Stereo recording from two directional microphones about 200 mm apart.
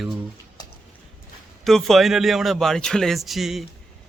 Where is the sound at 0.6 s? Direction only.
20° left (ahead or behind).